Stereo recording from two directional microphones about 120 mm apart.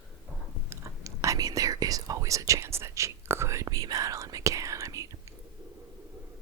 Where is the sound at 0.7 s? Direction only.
25° right (ahead or behind).